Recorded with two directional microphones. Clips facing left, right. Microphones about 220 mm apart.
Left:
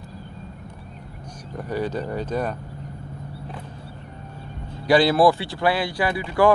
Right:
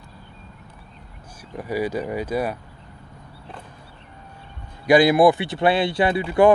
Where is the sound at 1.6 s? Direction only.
10° right (ahead or behind).